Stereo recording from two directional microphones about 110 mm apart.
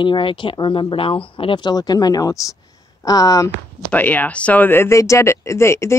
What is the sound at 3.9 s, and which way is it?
Speech, 15° left (ahead or behind).